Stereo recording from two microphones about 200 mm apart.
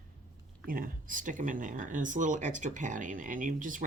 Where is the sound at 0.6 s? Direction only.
45° right (ahead or behind).